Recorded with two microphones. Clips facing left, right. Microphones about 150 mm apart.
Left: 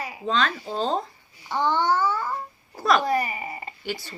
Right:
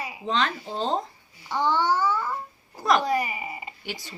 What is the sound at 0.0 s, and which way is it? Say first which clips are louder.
Speech: left 1 dB; 15° right (ahead or behind).